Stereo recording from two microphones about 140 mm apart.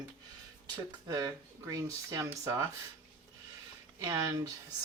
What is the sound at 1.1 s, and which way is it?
Speech, 25° right (ahead or behind).